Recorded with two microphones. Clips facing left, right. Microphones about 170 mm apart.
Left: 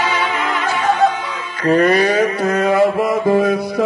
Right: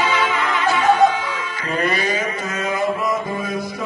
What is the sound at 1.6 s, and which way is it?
Music, 40° left (ahead or behind).